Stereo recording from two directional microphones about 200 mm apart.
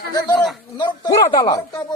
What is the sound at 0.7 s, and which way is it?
Speech, 20° left (ahead or behind).